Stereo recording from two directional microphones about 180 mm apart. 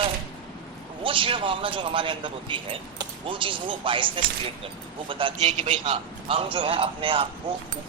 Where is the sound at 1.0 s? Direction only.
30° right (ahead or behind).